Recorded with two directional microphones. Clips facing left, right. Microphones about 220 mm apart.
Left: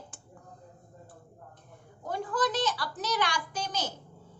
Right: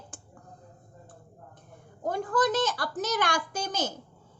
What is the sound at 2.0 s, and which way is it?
A child's voice, 45° right (ahead or behind).